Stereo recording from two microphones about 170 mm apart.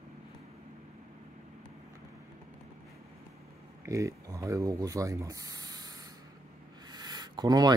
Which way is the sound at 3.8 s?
20° right (ahead or behind).